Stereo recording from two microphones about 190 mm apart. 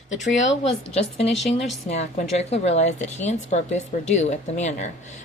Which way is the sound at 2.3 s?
35° left (ahead or behind).